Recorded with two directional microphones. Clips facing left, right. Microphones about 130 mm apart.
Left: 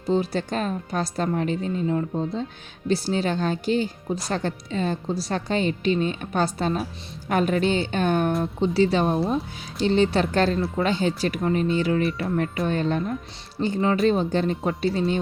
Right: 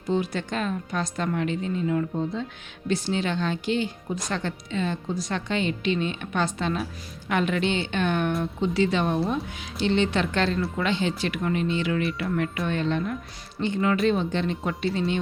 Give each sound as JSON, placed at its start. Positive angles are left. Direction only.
{"t": 0.1, "sound": "speech", "side_deg": 35}